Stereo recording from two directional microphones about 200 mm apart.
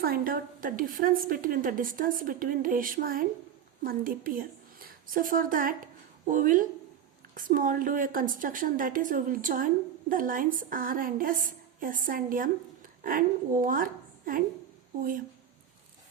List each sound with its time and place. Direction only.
0.0 s a woman's voice: 50° right (ahead or behind)